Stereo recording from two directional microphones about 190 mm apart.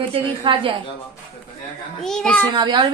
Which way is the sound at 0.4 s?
25° right (ahead or behind).